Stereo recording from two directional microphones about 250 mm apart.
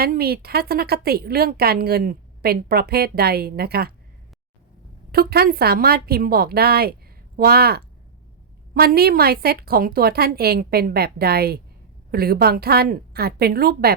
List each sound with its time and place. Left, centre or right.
0.0 s a woman's voice: right
5.1 s a woman's voice: right